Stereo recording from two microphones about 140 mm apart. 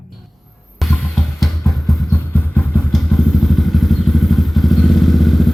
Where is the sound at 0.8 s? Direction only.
Centre (ahead or behind).